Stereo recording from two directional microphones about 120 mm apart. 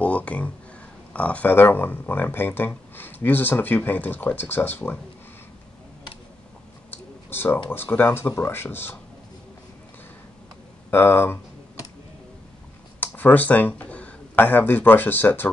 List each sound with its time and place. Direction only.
0.0 s a sound: 10° left (ahead or behind)
1.1 s speech: 10° left (ahead or behind)
6.9 s a sound: 15° left (ahead or behind)
7.7 s speech: 20° left (ahead or behind)
10.9 s speech: 20° left (ahead or behind)
13.0 s speech: 15° left (ahead or behind)